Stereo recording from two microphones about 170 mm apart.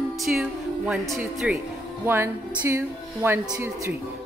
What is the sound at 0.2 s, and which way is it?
Speech, 5° right (ahead or behind).